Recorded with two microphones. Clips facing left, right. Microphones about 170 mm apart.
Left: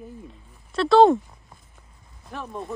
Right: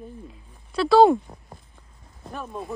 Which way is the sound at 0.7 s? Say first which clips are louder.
Even; 5° right (ahead or behind).